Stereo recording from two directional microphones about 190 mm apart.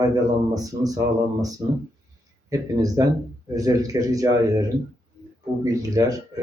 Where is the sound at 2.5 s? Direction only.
20° right (ahead or behind).